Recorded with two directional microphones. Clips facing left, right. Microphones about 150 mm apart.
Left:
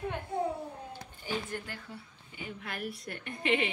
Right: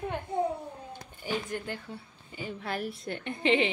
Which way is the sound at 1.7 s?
20° right (ahead or behind).